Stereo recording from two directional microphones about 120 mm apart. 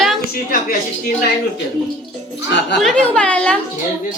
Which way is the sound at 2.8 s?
5° left (ahead or behind).